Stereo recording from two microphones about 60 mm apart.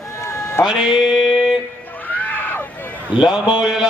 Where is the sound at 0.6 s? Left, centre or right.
Centre.